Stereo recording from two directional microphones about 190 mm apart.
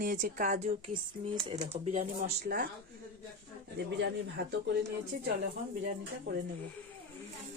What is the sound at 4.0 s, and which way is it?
Speech, 70° right (ahead or behind).